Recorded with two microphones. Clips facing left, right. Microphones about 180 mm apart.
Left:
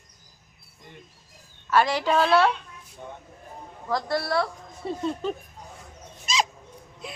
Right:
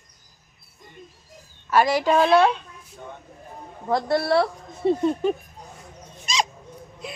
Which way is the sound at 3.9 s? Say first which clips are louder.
Right 5 dB; 25° right (ahead or behind).